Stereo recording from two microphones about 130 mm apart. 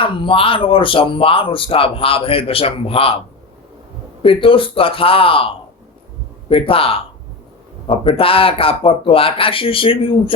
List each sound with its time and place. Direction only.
0.0 s speech: 40° left (ahead or behind)
4.2 s speech: 40° left (ahead or behind)
6.5 s speech: 45° left (ahead or behind)